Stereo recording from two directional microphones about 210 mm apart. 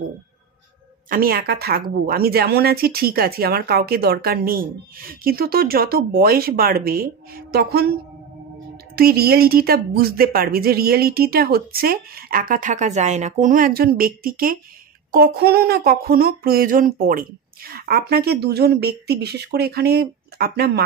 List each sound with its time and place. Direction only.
1.0 s a woman's voice: 45° right (ahead or behind)